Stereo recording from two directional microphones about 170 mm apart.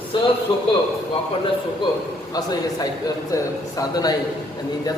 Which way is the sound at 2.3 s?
20° left (ahead or behind).